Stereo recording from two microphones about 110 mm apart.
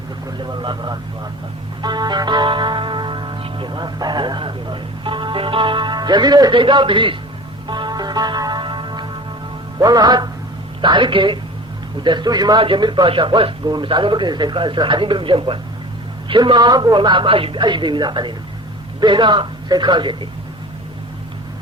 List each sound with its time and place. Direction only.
0.3 s speech: 40° right (ahead or behind)
1.8 s music: 40° right (ahead or behind)
9.7 s a man's voice: 35° right (ahead or behind)